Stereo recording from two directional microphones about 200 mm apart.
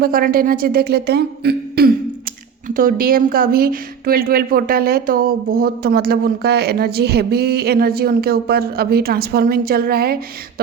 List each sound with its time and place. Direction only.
0.0 s speech: 45° right (ahead or behind)